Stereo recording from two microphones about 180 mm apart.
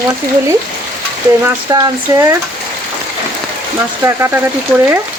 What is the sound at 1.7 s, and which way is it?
Speech, 20° right (ahead or behind).